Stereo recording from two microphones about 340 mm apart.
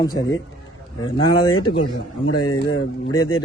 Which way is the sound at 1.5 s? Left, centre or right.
Left.